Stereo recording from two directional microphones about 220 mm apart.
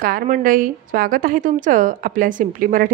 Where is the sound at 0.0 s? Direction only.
40° right (ahead or behind).